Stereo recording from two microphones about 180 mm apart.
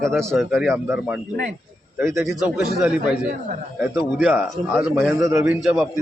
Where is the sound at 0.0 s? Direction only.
5° left (ahead or behind); by 5.5 s 15° right (ahead or behind).